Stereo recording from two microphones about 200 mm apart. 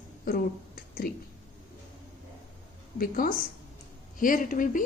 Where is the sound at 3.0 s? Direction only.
45° left (ahead or behind).